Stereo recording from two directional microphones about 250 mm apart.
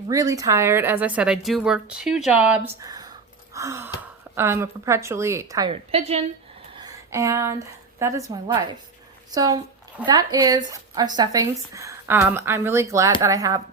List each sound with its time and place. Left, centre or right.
0.1 s a woman's voice: centre
2.6 s a sound: centre
4.4 s speech: centre; by 6.2 s right
6.7 s a woman's voice: centre